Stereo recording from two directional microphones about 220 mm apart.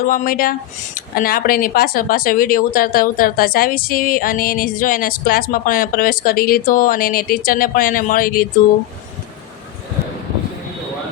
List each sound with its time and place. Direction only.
0.0 s speech: 40° left (ahead or behind)